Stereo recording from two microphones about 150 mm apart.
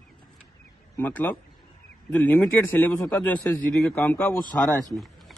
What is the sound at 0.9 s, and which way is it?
A man's voice, 10° left (ahead or behind).